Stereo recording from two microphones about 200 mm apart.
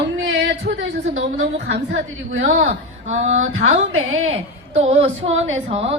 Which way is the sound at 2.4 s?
40° right (ahead or behind).